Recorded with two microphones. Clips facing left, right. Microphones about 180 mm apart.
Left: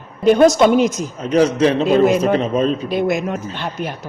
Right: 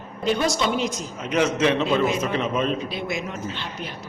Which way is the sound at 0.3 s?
50° left (ahead or behind).